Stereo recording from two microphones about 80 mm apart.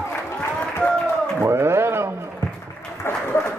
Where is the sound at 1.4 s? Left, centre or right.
Right.